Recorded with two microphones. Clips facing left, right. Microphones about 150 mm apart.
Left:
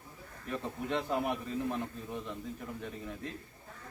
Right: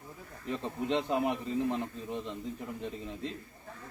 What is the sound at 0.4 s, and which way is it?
A man's voice, 20° right (ahead or behind).